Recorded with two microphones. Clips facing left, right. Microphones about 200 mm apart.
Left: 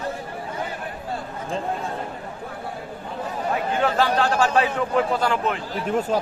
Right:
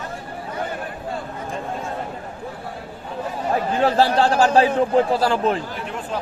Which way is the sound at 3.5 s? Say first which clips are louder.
Right 4 dB; 35° right (ahead or behind).